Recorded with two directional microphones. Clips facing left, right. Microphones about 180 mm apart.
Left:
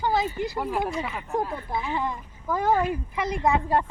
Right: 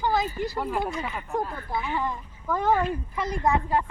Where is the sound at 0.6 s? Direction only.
5° left (ahead or behind).